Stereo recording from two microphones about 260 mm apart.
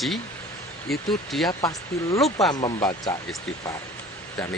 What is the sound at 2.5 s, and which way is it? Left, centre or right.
Speech, centre.